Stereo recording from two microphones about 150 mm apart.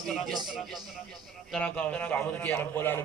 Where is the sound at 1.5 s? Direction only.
10° left (ahead or behind).